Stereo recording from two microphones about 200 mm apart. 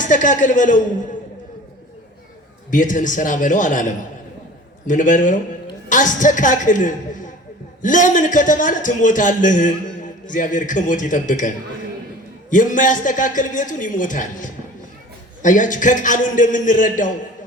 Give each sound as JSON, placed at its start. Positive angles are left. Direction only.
{"t": 0.0, "sound": "a man's voice", "side_deg": 40}
{"t": 2.6, "sound": "a man's voice", "side_deg": 40}